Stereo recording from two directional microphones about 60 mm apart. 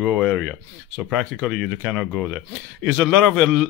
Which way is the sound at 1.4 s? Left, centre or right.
Centre.